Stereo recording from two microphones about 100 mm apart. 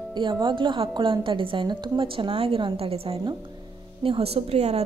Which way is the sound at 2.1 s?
65° right (ahead or behind).